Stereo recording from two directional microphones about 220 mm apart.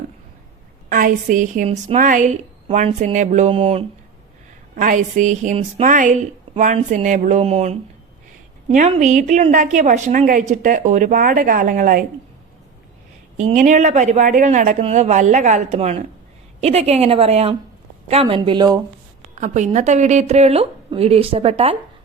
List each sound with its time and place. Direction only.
0.9 s a woman's voice: 35° right (ahead or behind)
4.7 s a woman's voice: 35° right (ahead or behind)
8.9 s a woman's voice: 30° right (ahead or behind)
13.3 s a woman's voice: 35° right (ahead or behind); by 18.8 s 20° right (ahead or behind)
19.4 s a woman's voice: 30° right (ahead or behind)